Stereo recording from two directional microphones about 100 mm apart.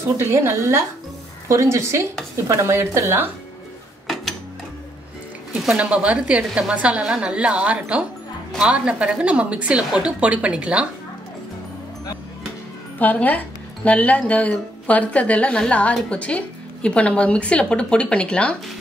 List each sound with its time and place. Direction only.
0.0 s a woman's voice: 25° right (ahead or behind)
4.1 s a sound: centre (ahead or behind)
5.5 s speech: 5° right (ahead or behind)
13.0 s speech: 15° left (ahead or behind)